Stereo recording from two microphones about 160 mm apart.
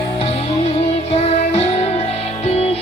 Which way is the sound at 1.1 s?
40° left (ahead or behind).